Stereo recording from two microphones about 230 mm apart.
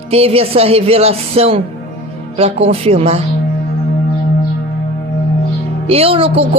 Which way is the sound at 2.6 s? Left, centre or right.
Right.